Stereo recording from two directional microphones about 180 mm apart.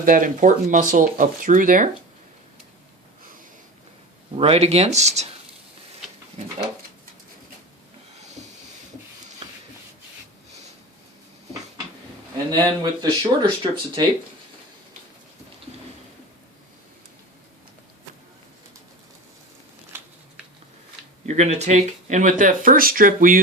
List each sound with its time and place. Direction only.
0.0 s speech: 50° right (ahead or behind)
4.4 s speech: 35° right (ahead or behind)
12.5 s speech: 25° right (ahead or behind)
19.9 s a sound: 10° right (ahead or behind)
21.2 s speech: 40° right (ahead or behind)